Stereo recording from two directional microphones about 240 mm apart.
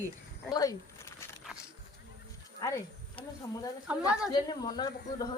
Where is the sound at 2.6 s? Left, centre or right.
Centre.